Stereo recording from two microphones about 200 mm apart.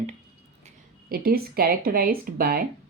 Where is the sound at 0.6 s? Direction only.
45° right (ahead or behind).